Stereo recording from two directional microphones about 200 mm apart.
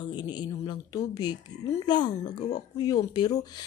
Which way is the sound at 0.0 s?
20° left (ahead or behind).